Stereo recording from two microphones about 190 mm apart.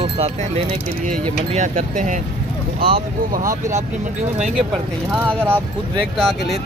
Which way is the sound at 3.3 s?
45° right (ahead or behind).